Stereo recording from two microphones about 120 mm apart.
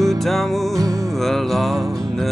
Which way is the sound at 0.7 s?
25° right (ahead or behind).